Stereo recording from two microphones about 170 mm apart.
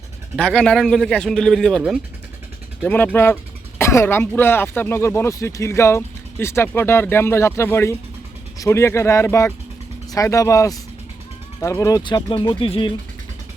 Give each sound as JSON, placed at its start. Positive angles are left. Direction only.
{"t": 0.3, "sound": "a man's voice", "side_deg": 5}
{"t": 2.8, "sound": "speech", "side_deg": 10}